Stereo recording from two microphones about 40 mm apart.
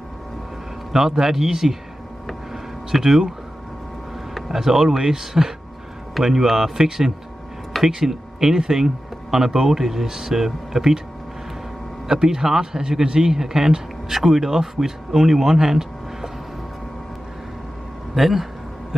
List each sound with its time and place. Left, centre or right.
0.9 s speech: centre
2.5 s a sound: centre
4.5 s speech: centre
12.1 s speech: centre
18.1 s speech: centre